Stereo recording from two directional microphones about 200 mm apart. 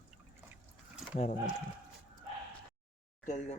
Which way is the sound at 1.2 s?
35° left (ahead or behind).